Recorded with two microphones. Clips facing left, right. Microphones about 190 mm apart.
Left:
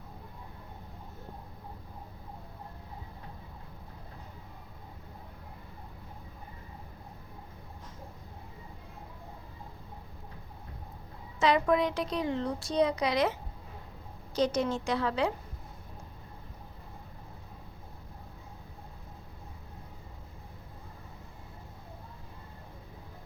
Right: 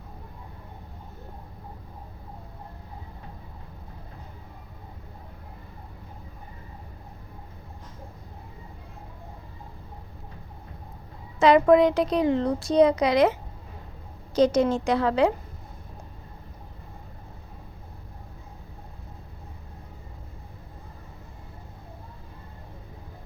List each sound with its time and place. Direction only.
11.3 s a woman's voice: 85° right
14.3 s a woman's voice: 90° right